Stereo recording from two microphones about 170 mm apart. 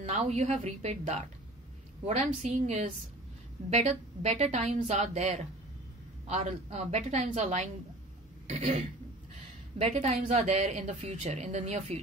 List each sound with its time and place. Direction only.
0.1 s a woman's voice: 40° right (ahead or behind)
8.5 s a sound: 40° right (ahead or behind)
9.8 s a woman's voice: 40° right (ahead or behind)